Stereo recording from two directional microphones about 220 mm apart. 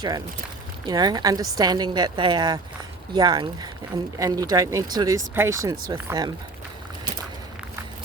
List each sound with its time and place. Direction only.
0.9 s a woman's voice: 20° right (ahead or behind)